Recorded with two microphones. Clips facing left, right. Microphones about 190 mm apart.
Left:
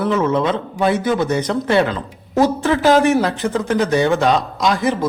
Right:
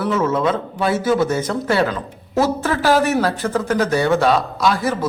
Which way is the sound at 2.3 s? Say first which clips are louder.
Left 3 dB; 15° left (ahead or behind).